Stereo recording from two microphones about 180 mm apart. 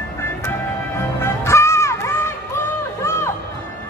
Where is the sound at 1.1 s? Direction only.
15° left (ahead or behind).